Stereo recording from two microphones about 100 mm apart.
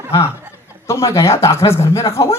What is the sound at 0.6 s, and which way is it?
A woman's voice, 30° left (ahead or behind).